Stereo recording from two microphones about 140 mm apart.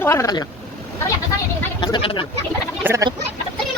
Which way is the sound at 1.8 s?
40° left (ahead or behind).